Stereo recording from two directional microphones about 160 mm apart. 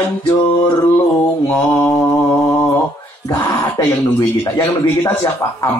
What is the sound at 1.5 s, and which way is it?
Mantra, 15° left (ahead or behind).